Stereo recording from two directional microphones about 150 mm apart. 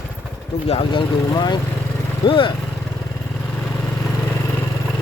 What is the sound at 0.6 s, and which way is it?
Speech, 40° left (ahead or behind).